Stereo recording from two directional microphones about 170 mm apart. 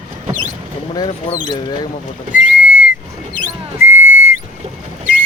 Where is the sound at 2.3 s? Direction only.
10° right (ahead or behind).